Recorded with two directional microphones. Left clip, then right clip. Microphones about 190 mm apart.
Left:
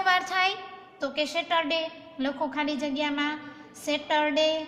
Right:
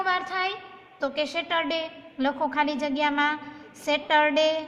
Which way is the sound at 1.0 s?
25° right (ahead or behind).